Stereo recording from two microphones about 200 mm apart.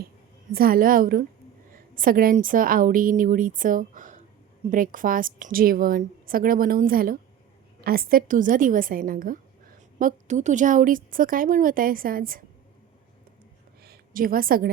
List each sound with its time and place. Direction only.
0.5 s a woman's voice: 45° right (ahead or behind)
13.8 s a woman's voice: 45° right (ahead or behind)